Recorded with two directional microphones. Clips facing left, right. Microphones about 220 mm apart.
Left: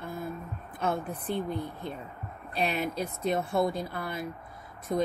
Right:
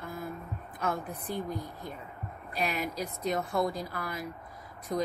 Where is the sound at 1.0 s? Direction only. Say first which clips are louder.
Left 4 dB; 30° left (ahead or behind).